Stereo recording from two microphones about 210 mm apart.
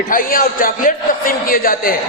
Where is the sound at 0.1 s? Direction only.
40° left (ahead or behind).